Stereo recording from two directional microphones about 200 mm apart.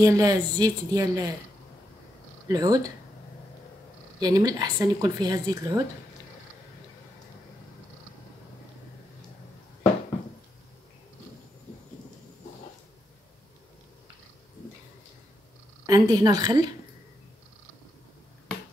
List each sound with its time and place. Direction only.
0.0 s speech: 15° right (ahead or behind)
2.4 s speech: 20° right (ahead or behind)
4.2 s speech: 20° right (ahead or behind)
15.9 s speech: 20° right (ahead or behind)